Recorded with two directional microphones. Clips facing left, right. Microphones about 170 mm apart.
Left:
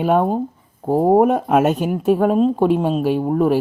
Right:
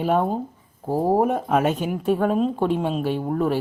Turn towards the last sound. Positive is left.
turn(degrees=40)  # may be behind; listen again after turning